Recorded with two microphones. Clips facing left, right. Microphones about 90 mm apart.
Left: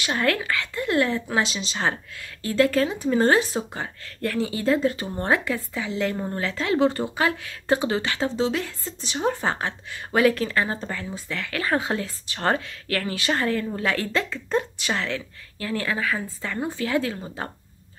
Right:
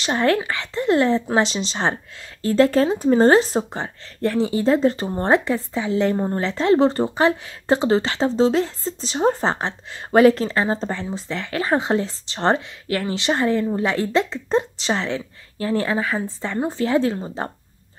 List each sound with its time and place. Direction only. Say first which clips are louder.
0.0 s speech: right 5 dB; 25° right (ahead or behind)